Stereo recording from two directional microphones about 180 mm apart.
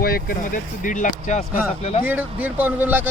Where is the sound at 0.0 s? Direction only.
55° left (ahead or behind); by 2.0 s 35° left (ahead or behind).